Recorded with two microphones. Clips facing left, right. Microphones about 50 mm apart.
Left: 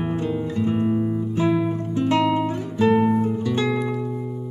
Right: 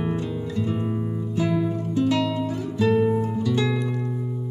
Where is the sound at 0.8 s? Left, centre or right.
Centre.